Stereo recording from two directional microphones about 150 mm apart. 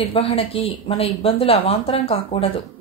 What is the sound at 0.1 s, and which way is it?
Speech, 40° left (ahead or behind).